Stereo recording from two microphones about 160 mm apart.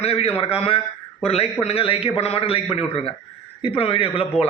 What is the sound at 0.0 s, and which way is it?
Speech, 40° left (ahead or behind).